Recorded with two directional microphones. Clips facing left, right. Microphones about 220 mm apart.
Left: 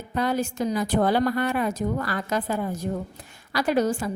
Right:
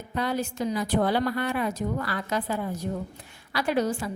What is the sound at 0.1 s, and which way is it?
A woman's voice, 45° left (ahead or behind).